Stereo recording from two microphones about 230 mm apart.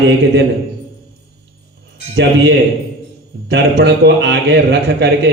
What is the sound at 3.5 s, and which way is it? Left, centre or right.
A man's voice, right.